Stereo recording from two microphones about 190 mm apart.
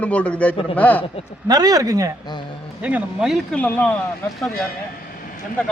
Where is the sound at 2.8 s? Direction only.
10° right (ahead or behind); by 4.0 s 10° left (ahead or behind).